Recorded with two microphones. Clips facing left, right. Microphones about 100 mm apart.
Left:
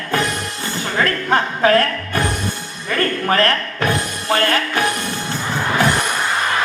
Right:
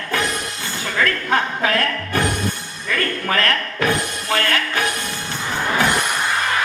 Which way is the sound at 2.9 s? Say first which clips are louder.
Left 4 dB; 35° left (ahead or behind).